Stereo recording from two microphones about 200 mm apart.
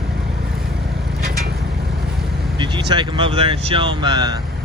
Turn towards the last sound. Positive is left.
turn(degrees=-20)  # may be behind; listen again after turning